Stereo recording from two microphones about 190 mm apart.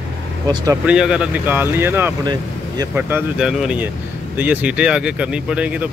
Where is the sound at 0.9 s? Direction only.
5° right (ahead or behind).